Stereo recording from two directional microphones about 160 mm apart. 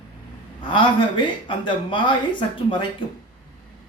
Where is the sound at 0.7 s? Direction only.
30° left (ahead or behind).